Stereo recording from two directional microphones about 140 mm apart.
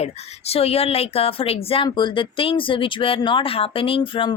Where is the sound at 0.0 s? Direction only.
45° left (ahead or behind).